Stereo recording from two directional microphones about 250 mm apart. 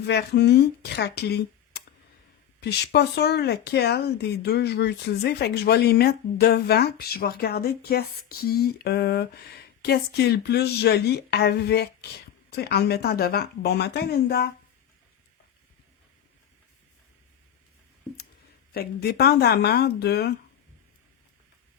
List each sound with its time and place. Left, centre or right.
0.1 s speech: left
18.7 s speech: left